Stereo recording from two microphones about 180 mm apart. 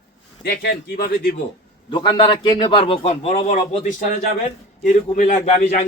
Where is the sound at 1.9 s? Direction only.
25° left (ahead or behind).